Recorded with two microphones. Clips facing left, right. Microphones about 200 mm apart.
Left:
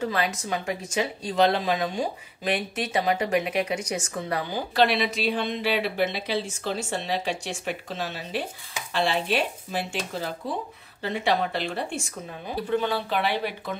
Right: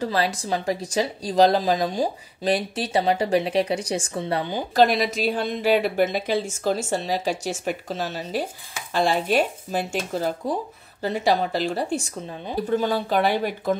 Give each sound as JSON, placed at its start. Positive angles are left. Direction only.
{"t": 0.0, "sound": "speech", "side_deg": -35}
{"t": 4.7, "sound": "a woman's voice", "side_deg": -40}